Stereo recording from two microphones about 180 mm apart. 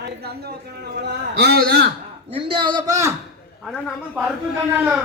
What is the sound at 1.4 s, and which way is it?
Speech, 60° right (ahead or behind).